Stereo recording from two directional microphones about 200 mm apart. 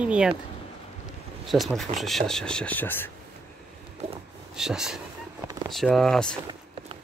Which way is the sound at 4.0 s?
30° right (ahead or behind).